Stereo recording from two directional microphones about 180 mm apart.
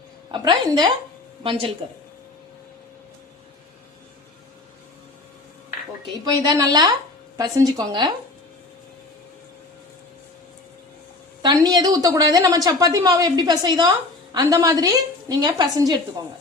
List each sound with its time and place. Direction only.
0.3 s a woman's voice: 25° right (ahead or behind)
6.2 s a woman's voice: 20° right (ahead or behind)
11.4 s a woman's voice: 20° right (ahead or behind)